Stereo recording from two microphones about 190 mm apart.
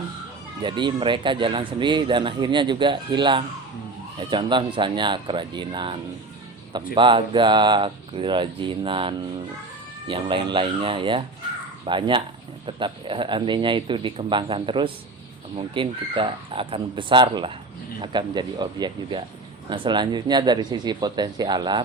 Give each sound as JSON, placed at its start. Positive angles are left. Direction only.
{"t": 0.6, "sound": "speech", "side_deg": -25}